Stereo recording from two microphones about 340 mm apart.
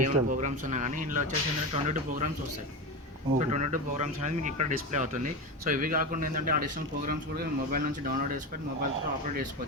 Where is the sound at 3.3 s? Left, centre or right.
Right.